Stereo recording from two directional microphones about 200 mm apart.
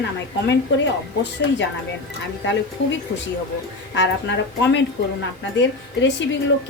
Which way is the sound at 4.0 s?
65° left (ahead or behind).